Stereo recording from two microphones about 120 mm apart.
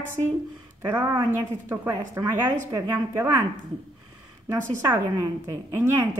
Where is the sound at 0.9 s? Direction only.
25° right (ahead or behind).